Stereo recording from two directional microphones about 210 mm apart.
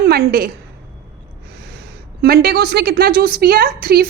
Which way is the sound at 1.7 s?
50° right (ahead or behind).